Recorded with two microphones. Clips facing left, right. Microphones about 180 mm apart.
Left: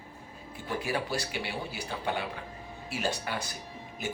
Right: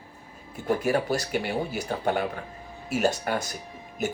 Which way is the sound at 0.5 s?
45° right (ahead or behind).